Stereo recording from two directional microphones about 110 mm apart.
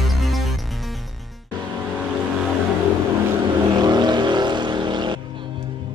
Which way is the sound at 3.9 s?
40° right (ahead or behind).